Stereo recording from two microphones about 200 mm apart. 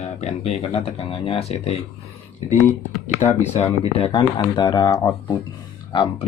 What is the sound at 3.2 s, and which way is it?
Speech, 35° left (ahead or behind).